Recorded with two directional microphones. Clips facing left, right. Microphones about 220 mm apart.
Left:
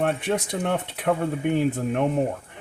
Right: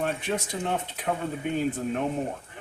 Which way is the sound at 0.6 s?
65° left (ahead or behind).